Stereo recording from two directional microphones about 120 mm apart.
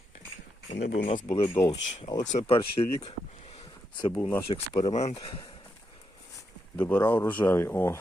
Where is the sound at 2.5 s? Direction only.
50° left (ahead or behind).